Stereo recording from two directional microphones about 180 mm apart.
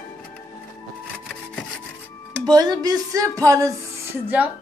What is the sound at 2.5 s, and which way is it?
Music, 20° right (ahead or behind).